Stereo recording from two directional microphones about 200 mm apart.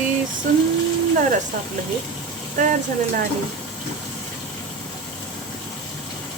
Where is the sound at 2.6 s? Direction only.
40° right (ahead or behind).